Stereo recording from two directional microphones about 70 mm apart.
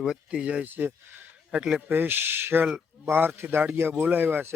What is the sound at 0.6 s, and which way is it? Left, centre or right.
Speech, right.